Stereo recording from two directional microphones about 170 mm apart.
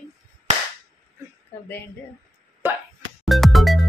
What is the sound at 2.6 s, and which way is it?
Plop, 10° right (ahead or behind).